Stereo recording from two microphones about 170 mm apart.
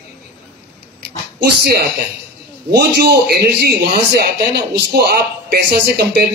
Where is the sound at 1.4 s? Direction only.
70° right (ahead or behind).